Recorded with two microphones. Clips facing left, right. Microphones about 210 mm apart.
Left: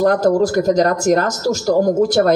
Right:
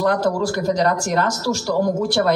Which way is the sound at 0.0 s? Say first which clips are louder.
Left 5 dB; 45° left (ahead or behind).